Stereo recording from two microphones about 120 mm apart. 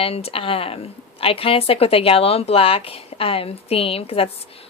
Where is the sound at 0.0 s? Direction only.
55° left (ahead or behind).